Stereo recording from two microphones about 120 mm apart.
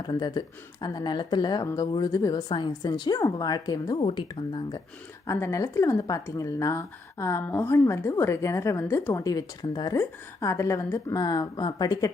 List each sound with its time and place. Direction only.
0.0 s a woman's voice: 35° left (ahead or behind)
5.2 s a woman's voice: 25° left (ahead or behind)
10.0 s a woman's voice: 25° left (ahead or behind)